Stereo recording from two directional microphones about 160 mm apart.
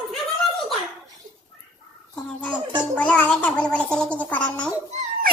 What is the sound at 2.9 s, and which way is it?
Music, 5° left (ahead or behind).